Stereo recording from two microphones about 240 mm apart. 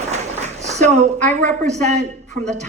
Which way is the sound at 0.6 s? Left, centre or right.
Right.